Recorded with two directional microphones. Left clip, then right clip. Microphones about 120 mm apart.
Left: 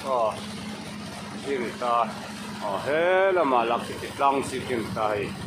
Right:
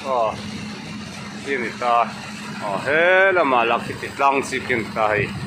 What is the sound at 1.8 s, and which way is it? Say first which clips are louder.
Speech: right 6 dB; 20° right (ahead or behind).